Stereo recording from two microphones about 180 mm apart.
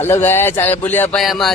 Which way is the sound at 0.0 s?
15° left (ahead or behind).